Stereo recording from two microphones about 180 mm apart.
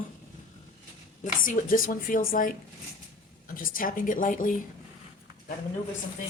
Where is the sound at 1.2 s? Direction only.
50° left (ahead or behind).